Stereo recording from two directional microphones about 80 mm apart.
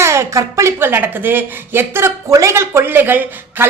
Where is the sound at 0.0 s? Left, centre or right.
Right.